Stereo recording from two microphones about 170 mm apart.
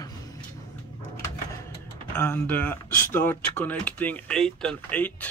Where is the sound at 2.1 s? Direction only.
10° left (ahead or behind).